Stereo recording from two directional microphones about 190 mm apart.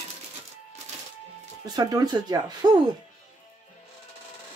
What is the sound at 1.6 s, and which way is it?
Speech, 20° right (ahead or behind).